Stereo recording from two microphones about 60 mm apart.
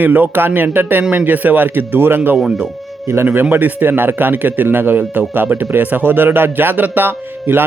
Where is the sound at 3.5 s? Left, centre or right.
Right.